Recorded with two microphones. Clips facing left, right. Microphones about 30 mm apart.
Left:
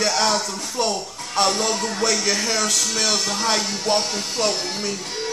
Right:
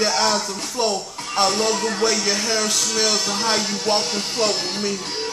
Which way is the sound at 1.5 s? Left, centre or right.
Centre.